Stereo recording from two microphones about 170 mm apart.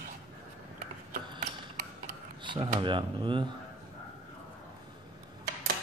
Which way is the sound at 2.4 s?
30° right (ahead or behind).